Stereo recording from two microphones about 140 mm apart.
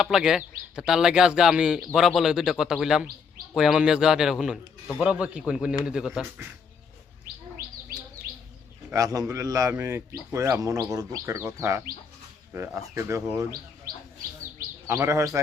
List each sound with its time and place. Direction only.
0.0 s a man's voice: 5° right (ahead or behind)
8.2 s chirp: 5° right (ahead or behind)
8.9 s a man's voice: 25° right (ahead or behind)
13.9 s chirp: 90° right
14.8 s a man's voice: 20° right (ahead or behind)